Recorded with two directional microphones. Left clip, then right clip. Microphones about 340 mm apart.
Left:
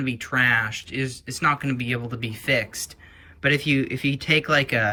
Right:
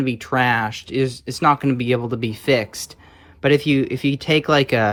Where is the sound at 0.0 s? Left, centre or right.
Centre.